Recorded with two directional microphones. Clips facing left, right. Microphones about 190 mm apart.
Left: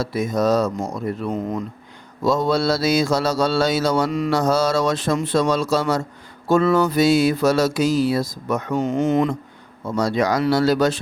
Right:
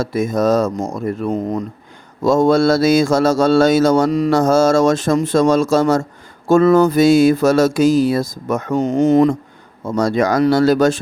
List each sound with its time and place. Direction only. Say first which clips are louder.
0.0 s speech: right 4 dB; 50° right (ahead or behind)